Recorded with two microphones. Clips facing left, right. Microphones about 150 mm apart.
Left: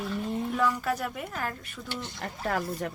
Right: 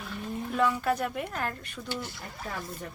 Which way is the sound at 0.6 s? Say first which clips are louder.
Right 3 dB; 5° right (ahead or behind).